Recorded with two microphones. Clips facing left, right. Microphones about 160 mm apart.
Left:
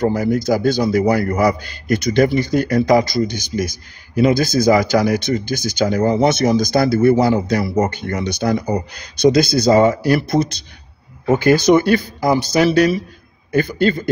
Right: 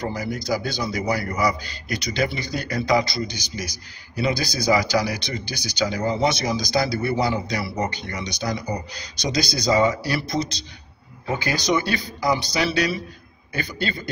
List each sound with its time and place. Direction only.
0.0 s a man's voice: 50° left (ahead or behind)